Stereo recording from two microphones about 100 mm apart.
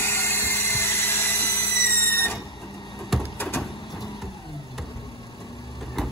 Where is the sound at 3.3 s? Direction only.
20° left (ahead or behind).